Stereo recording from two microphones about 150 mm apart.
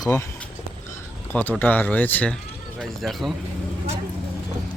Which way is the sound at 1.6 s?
10° left (ahead or behind).